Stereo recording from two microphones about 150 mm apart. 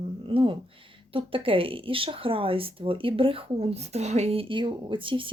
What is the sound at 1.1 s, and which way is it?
Speech, 35° right (ahead or behind).